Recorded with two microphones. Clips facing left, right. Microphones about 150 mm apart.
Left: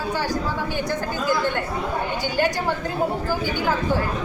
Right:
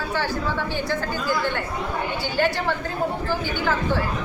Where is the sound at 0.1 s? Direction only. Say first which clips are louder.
Left 1 dB; 15° left (ahead or behind).